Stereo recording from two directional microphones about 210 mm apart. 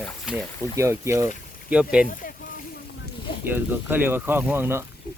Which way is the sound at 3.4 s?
10° right (ahead or behind).